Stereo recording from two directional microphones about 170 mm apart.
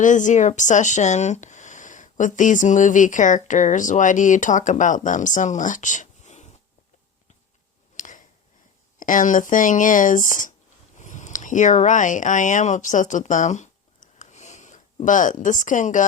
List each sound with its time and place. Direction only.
0.0 s speech: 50° left (ahead or behind)
7.9 s a sound: 50° left (ahead or behind)
9.0 s speech: 50° left (ahead or behind)